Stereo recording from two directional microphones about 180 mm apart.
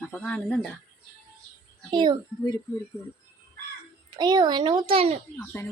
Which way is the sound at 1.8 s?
25° right (ahead or behind).